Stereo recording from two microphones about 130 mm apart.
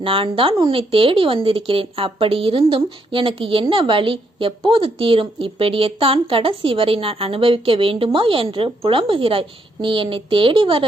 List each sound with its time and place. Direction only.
0.0 s speech: 45° right (ahead or behind)